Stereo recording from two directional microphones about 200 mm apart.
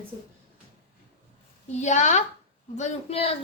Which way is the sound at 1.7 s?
35° left (ahead or behind).